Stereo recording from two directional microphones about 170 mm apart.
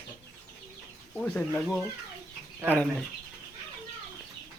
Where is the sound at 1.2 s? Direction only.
10° left (ahead or behind).